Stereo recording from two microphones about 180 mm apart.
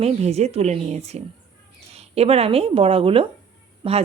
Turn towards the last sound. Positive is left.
turn(degrees=-30)  # may be behind; listen again after turning